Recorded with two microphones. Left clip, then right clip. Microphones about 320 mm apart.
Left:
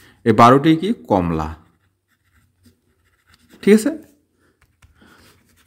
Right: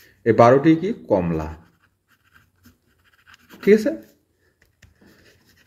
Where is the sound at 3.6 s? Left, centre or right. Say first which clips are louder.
Left 1 dB; left.